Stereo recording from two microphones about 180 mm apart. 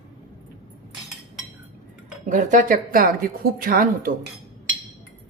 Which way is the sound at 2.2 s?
45° right (ahead or behind).